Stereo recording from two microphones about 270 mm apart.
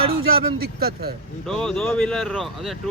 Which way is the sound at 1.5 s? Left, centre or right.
Centre.